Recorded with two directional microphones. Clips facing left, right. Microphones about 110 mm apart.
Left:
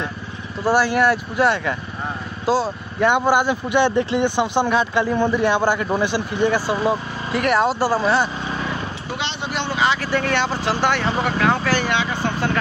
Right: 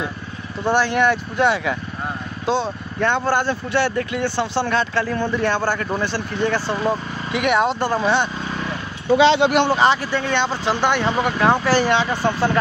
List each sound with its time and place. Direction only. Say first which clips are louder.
0.7 s speech: left 1 dB; 5° left (ahead or behind); by 4.3 s 25° left (ahead or behind)
4.4 s speech: even; 15° left (ahead or behind)
9.3 s speech: right 12 dB; 85° right
9.7 s speech: right 4 dB; 40° right (ahead or behind)
10.1 s speech: even; 5° left (ahead or behind)
11.0 s speech: right 1 dB; 20° right (ahead or behind)